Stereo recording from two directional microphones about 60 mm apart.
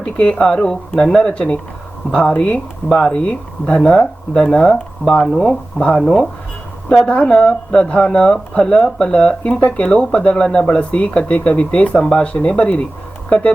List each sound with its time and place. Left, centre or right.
0.0 s speech: centre